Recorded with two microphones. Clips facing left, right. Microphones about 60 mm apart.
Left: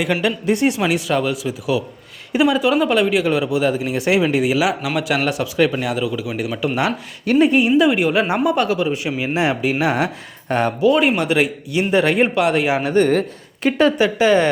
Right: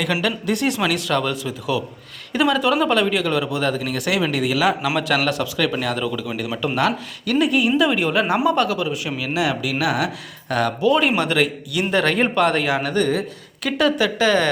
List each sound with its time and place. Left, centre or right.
0.2 s speech: centre
4.9 s speech: centre
7.3 s speech: left
7.8 s speech: centre
10.8 s speech: centre
12.6 s speech: left